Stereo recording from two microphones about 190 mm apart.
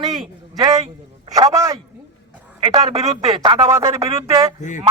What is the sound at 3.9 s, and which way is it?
Speech, 15° right (ahead or behind).